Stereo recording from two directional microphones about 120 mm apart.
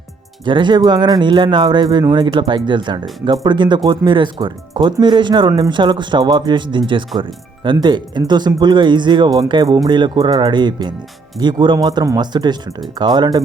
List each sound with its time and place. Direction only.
0.4 s speech: 40° right (ahead or behind)